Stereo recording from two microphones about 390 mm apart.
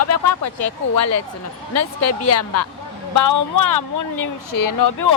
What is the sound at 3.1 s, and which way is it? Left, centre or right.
Speech, left.